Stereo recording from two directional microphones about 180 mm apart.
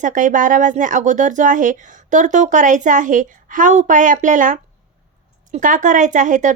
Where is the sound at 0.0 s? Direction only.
45° right (ahead or behind).